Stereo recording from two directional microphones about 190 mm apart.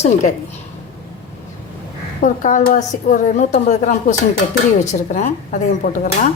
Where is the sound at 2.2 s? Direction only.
40° left (ahead or behind).